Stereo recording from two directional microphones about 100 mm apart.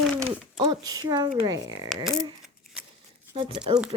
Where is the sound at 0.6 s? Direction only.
45° right (ahead or behind).